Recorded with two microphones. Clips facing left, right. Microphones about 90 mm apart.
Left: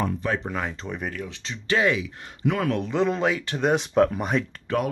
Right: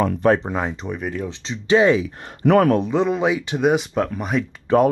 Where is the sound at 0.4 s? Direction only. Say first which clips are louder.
Right 5 dB; 25° right (ahead or behind).